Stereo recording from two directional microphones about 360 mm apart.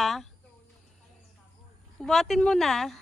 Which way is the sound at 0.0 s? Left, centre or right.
Centre.